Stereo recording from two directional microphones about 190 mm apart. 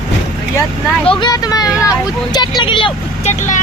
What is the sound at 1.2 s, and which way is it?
Speech, 20° left (ahead or behind).